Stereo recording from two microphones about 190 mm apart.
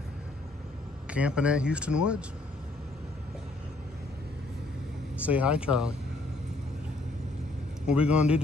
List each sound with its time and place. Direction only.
1.1 s speech: 5° right (ahead or behind)
5.2 s speech: 5° right (ahead or behind)
7.8 s speech: 5° right (ahead or behind)